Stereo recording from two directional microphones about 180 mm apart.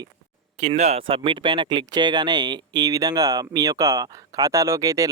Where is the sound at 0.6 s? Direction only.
40° right (ahead or behind); by 5.1 s 20° right (ahead or behind).